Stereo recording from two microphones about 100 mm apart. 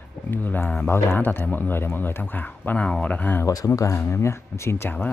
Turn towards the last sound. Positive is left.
turn(degrees=20)  # may be behind; listen again after turning